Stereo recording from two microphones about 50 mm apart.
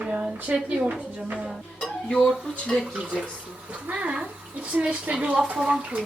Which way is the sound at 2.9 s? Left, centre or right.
Centre.